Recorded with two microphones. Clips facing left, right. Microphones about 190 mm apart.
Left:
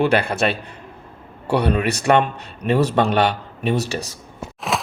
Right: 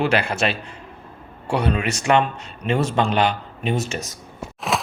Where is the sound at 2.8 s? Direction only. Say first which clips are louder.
Left 3 dB; 65° left (ahead or behind).